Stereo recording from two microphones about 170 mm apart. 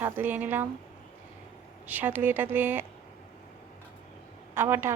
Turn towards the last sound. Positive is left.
turn(degrees=-15)  # may be behind; listen again after turning